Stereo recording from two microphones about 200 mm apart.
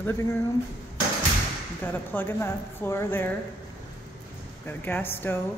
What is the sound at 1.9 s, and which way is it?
Speech, 10° left (ahead or behind).